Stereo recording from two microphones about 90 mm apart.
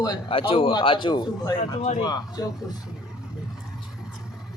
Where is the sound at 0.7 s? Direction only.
60° left (ahead or behind).